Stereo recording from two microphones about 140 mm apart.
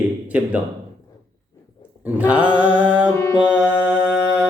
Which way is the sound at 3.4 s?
10° right (ahead or behind).